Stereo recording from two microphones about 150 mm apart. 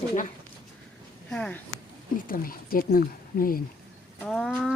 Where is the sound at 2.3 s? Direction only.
70° left (ahead or behind).